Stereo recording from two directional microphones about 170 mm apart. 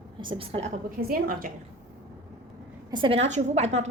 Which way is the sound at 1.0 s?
55° right (ahead or behind).